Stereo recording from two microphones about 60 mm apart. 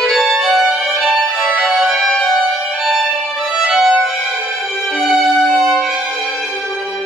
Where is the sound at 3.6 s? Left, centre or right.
Centre.